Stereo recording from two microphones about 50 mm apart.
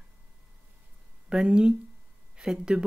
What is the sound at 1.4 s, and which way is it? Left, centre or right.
Speech, right.